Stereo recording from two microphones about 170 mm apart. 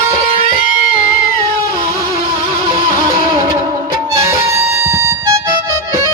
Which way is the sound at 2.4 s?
30° right (ahead or behind).